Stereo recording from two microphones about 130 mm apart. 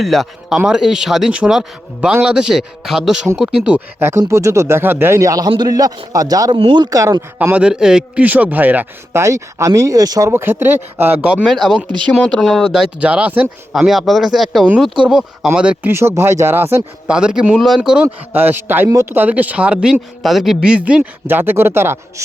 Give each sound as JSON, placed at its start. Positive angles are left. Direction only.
{"t": 0.0, "sound": "a man's voice", "side_deg": 0}
{"t": 7.5, "sound": "a man's voice", "side_deg": -5}
{"t": 11.3, "sound": "a man's voice", "side_deg": 0}
{"t": 15.9, "sound": "speech", "side_deg": -20}
{"t": 17.1, "sound": "a man's voice", "side_deg": -5}